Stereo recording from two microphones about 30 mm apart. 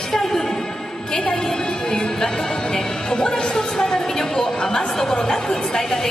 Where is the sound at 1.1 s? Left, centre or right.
Left.